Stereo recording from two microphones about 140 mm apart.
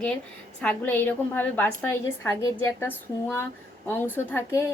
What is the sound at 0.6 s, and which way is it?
A woman's voice, 10° left (ahead or behind).